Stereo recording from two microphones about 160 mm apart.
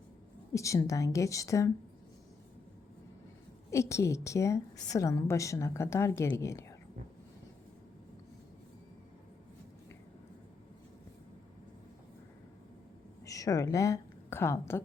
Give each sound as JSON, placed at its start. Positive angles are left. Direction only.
{"t": 0.5, "sound": "a woman's voice", "side_deg": 20}
{"t": 3.7, "sound": "a woman's voice", "side_deg": 20}
{"t": 13.2, "sound": "a woman's voice", "side_deg": 20}